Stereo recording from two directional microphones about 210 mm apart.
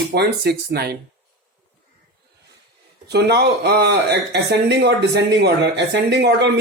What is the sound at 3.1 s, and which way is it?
Speech, 50° right (ahead or behind).